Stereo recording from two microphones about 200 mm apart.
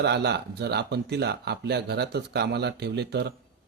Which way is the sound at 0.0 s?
55° right (ahead or behind).